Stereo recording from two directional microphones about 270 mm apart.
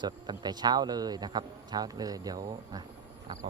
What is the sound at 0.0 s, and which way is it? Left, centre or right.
Speech, centre.